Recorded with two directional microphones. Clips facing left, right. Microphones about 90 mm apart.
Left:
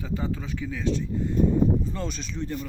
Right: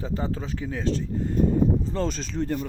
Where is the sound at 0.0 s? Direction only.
35° right (ahead or behind).